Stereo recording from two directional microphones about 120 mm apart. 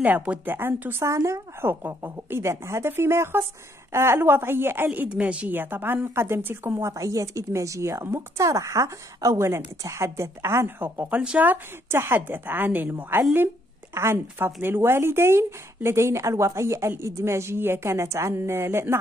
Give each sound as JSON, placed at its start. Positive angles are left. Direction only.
{"t": 0.0, "sound": "a woman's voice", "side_deg": -10}